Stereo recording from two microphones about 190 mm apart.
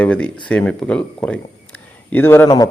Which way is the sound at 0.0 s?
5° left (ahead or behind).